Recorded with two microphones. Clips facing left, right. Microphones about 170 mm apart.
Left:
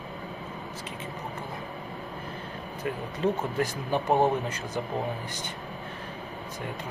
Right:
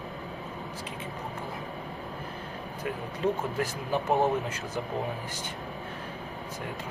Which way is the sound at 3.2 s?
5° right (ahead or behind).